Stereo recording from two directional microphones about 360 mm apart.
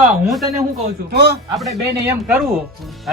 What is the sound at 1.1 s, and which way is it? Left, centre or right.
Speech, right.